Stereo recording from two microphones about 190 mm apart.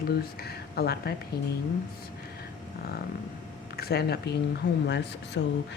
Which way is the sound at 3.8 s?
55° left (ahead or behind).